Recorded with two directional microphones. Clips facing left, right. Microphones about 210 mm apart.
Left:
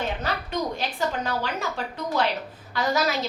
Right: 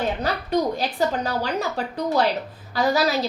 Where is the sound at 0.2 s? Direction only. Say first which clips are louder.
Right 6 dB; 35° right (ahead or behind).